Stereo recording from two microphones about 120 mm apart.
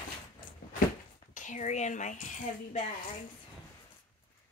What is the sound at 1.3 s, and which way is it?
Speech, 90° left.